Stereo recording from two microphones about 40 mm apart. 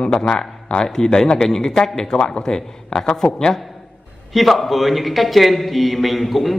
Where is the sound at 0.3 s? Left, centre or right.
Centre.